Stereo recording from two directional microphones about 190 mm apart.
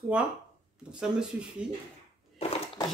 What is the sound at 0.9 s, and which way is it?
Speech, 5° right (ahead or behind).